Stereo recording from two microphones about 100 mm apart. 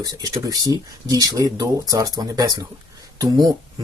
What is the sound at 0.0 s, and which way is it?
Speech, 40° right (ahead or behind).